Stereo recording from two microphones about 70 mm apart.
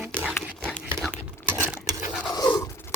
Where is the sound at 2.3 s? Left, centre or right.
Left.